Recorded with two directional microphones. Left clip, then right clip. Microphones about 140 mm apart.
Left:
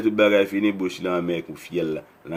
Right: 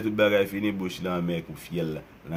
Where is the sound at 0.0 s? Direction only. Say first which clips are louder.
Left 4 dB; 20° left (ahead or behind).